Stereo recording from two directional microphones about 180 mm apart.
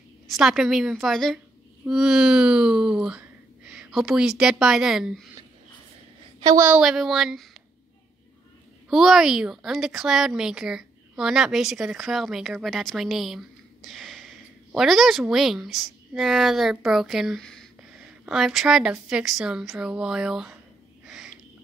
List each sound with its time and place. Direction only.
0.3 s speech: centre (ahead or behind)
6.4 s a woman's voice: 15° right (ahead or behind)
6.8 s speech: centre (ahead or behind)
8.9 s speech: centre (ahead or behind)
21.0 s a sound: centre (ahead or behind)